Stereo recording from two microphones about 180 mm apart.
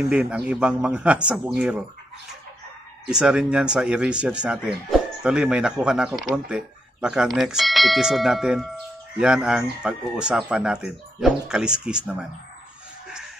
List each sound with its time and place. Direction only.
0.1 s a man's voice: 5° right (ahead or behind)
3.1 s a man's voice: 5° right (ahead or behind)